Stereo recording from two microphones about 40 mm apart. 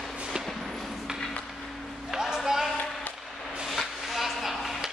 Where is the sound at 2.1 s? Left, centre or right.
Centre.